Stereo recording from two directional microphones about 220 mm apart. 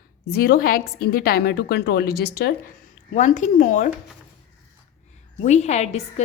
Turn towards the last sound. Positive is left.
turn(degrees=30)  # may be behind; listen again after turning